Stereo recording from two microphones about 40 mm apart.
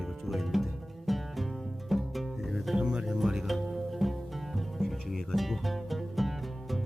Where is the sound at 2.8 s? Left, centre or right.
Centre.